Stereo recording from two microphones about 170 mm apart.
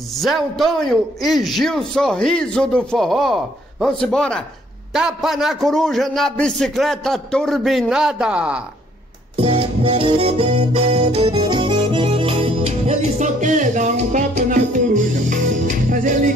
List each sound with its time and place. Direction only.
0.1 s a man's voice: centre (ahead or behind)
9.4 s music: 35° right (ahead or behind); by 16.3 s 50° right (ahead or behind)